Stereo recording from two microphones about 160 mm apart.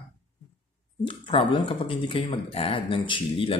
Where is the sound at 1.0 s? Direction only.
30° left (ahead or behind).